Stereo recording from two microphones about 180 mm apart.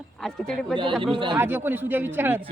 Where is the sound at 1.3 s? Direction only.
10° right (ahead or behind).